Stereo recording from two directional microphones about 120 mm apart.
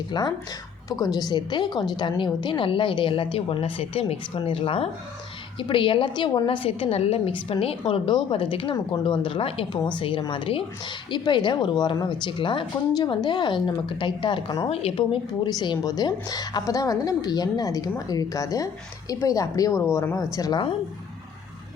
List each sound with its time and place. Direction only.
0.1 s a woman's voice: 35° left (ahead or behind)
14.7 s a woman's voice: 60° left (ahead or behind)
15.5 s a woman's voice: 35° left (ahead or behind)